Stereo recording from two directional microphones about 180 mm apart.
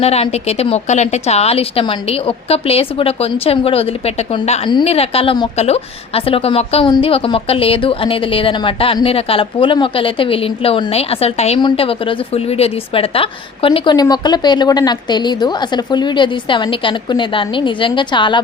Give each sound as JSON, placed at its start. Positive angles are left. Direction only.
{"t": 0.0, "sound": "a woman's voice", "side_deg": 35}